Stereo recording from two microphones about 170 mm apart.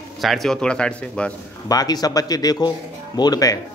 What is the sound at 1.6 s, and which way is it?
Speech, 20° left (ahead or behind).